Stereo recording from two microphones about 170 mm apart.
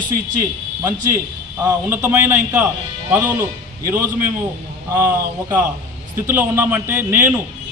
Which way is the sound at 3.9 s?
15° right (ahead or behind).